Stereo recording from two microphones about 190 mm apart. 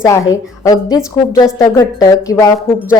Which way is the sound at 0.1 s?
15° left (ahead or behind).